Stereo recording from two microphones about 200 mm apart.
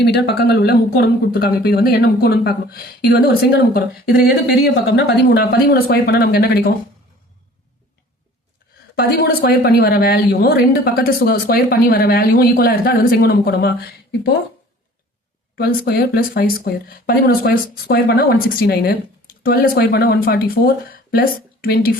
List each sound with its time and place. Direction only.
0.0 s a woman's voice: 55° left (ahead or behind)
9.0 s a woman's voice: 50° left (ahead or behind)
15.5 s a woman's voice: 50° left (ahead or behind)